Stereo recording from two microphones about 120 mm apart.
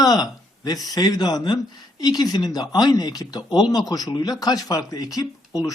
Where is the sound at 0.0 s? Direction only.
35° left (ahead or behind).